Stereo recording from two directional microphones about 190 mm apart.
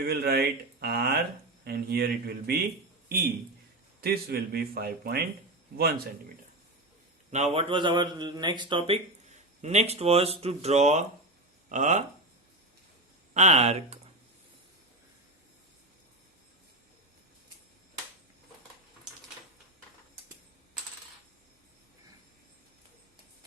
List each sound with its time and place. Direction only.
0.1 s speech: 55° right (ahead or behind)
4.0 s a man's voice: 55° right (ahead or behind)
7.3 s a man's voice: 35° right (ahead or behind)
13.3 s a man's voice: 35° right (ahead or behind)